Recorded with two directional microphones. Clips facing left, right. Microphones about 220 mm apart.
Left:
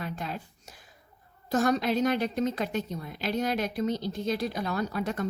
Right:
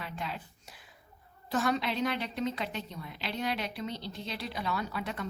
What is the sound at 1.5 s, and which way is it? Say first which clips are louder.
A woman's voice: left 5 dB; 40° left (ahead or behind).